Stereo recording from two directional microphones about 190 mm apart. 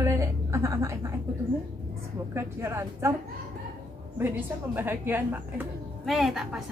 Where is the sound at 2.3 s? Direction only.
15° right (ahead or behind).